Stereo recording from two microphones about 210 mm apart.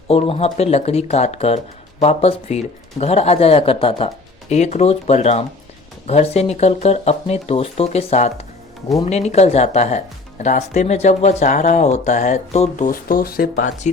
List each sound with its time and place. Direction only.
0.1 s speech: 30° left (ahead or behind)